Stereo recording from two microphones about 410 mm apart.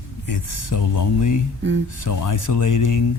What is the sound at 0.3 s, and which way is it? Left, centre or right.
Speech, left.